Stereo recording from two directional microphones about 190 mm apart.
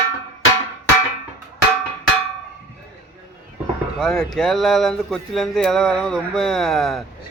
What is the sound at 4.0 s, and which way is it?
Speech, 5° left (ahead or behind).